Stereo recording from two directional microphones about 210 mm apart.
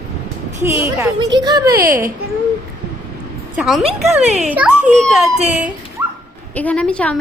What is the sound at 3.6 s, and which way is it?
Speech, centre (ahead or behind).